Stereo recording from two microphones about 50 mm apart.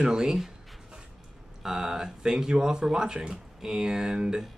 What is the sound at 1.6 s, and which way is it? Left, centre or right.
Speech, centre.